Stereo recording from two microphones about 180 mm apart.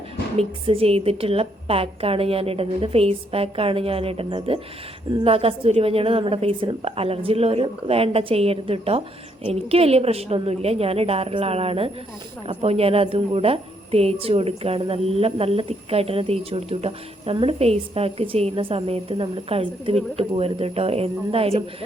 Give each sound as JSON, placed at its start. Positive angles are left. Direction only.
{"t": 0.3, "sound": "a woman's voice", "side_deg": -30}